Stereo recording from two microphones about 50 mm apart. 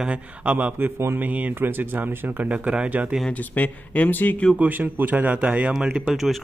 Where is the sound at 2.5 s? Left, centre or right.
Right.